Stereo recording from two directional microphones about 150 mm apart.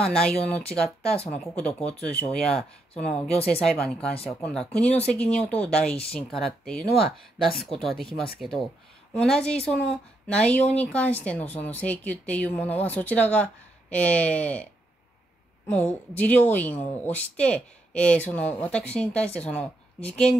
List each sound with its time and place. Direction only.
0.0 s a woman's voice: 5° left (ahead or behind)
15.7 s a woman's voice: 10° left (ahead or behind)